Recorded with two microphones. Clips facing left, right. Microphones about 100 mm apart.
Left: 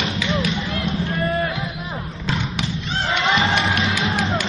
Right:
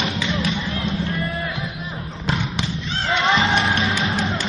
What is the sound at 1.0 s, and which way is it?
Music, 30° left (ahead or behind).